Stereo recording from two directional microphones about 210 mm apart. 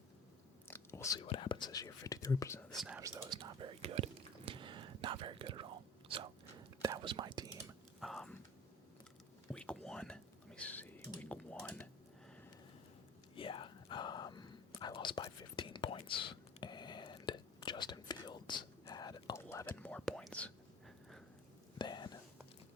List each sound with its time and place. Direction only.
0.7 s chewing: 15° left (ahead or behind)
1.2 s speech: 25° left (ahead or behind)
2.7 s whispering: 5° right (ahead or behind)
8.0 s a sound: centre (ahead or behind)
9.5 s whispering: 5° left (ahead or behind)
13.3 s whispering: 25° left (ahead or behind); by 20.5 s 5° left (ahead or behind)
21.8 s whispering: 20° left (ahead or behind)